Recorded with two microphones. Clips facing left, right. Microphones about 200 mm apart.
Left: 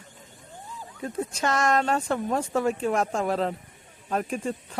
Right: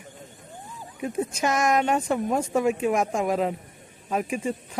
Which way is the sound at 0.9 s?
15° right (ahead or behind).